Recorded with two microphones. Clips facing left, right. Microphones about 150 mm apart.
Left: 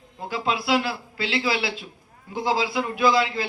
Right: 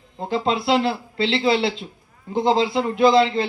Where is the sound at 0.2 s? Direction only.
25° right (ahead or behind).